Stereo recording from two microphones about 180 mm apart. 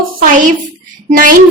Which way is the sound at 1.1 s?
50° right (ahead or behind).